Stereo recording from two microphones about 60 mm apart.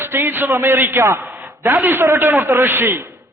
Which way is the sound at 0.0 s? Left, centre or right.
Right.